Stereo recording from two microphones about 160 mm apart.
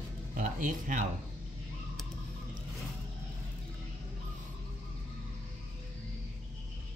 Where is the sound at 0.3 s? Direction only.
60° right (ahead or behind).